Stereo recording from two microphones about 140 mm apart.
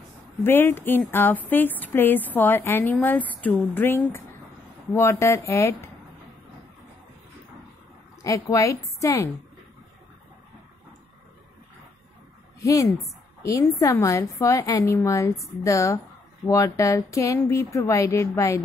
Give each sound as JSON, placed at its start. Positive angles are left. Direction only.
{"t": 0.4, "sound": "a woman's voice", "side_deg": 15}
{"t": 8.2, "sound": "a woman's voice", "side_deg": 20}
{"t": 13.4, "sound": "a woman's voice", "side_deg": 20}